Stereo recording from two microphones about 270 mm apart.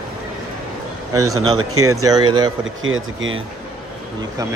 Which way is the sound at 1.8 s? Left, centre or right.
Centre.